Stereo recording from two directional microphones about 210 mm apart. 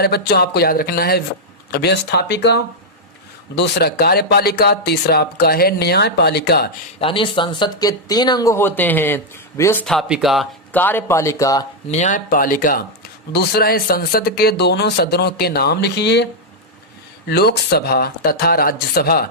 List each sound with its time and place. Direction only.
0.0 s speech: 50° left (ahead or behind)
7.0 s speech: 25° left (ahead or behind)
9.8 s speech: centre (ahead or behind)
11.9 s speech: 35° left (ahead or behind); by 16.2 s 55° left (ahead or behind)
17.2 s speech: 50° left (ahead or behind)